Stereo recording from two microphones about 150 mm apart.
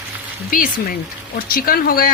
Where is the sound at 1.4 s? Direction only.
75° left (ahead or behind).